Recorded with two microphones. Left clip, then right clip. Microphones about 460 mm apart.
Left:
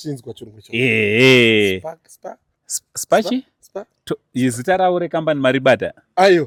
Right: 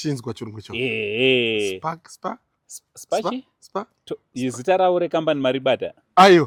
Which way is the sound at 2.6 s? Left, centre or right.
Left.